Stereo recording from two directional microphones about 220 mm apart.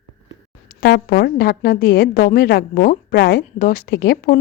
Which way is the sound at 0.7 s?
45° left (ahead or behind).